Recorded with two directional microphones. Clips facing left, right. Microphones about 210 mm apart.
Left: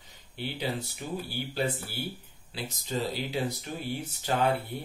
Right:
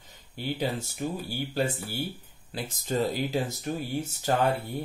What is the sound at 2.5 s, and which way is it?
Speech, 50° right (ahead or behind).